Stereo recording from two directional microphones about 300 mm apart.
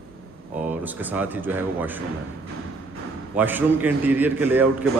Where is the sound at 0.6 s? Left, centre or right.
Centre.